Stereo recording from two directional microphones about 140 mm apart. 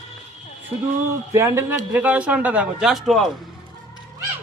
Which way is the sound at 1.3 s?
20° right (ahead or behind).